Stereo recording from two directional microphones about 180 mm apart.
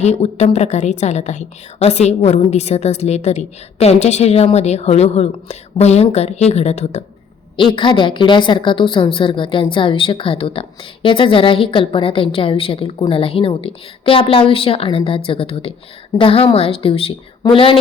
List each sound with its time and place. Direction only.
0.0 s a woman's voice: 35° left (ahead or behind)